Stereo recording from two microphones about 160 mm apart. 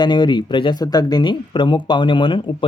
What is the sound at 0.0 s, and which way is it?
Speech, 30° left (ahead or behind).